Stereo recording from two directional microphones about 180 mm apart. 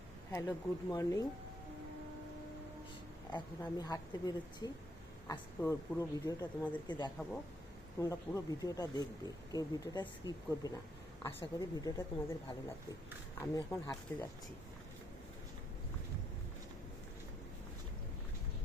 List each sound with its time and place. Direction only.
0.3 s speech: 15° left (ahead or behind)
3.3 s speech: 20° left (ahead or behind)